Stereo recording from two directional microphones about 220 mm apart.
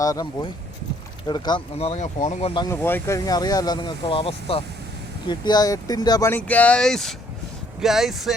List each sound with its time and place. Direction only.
0.0 s speech: 15° left (ahead or behind)
2.7 s speech: 10° left (ahead or behind)